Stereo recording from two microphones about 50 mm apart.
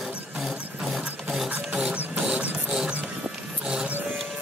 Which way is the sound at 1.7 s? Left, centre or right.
Right.